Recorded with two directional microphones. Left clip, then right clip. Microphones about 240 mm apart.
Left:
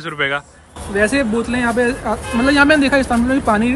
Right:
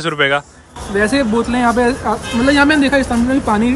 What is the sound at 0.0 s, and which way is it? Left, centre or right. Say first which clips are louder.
A man's voice: right 5 dB; centre.